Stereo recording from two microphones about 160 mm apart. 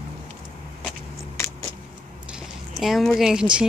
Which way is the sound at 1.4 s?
20° left (ahead or behind).